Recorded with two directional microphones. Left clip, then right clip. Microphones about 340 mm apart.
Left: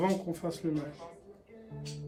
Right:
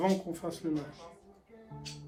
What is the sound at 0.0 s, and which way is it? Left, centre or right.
Speech, centre.